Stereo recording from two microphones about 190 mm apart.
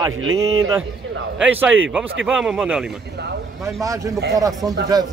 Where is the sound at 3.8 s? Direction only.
15° right (ahead or behind).